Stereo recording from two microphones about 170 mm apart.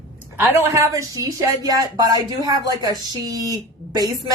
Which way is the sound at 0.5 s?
15° right (ahead or behind).